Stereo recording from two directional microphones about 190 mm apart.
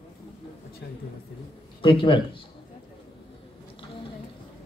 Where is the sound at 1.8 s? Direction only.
25° left (ahead or behind).